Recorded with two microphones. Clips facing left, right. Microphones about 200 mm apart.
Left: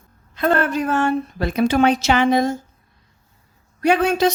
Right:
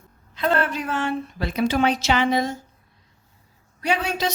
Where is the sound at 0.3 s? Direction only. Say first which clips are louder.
Left 4 dB; 50° left (ahead or behind).